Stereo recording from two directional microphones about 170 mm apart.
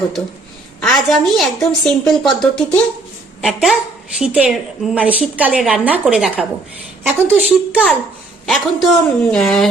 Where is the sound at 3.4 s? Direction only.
Centre (ahead or behind).